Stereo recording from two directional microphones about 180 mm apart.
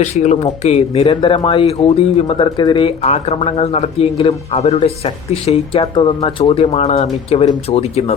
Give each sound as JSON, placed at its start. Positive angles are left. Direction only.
{"t": 0.0, "sound": "speech", "side_deg": 40}